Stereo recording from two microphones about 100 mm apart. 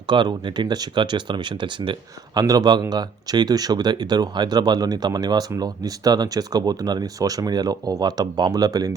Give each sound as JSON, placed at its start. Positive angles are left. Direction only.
{"t": 0.1, "sound": "speech", "side_deg": -50}